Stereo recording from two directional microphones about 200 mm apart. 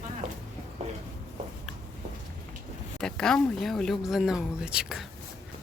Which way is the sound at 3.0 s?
5° left (ahead or behind).